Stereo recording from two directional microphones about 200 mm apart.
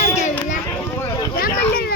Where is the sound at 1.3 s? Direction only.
45° left (ahead or behind).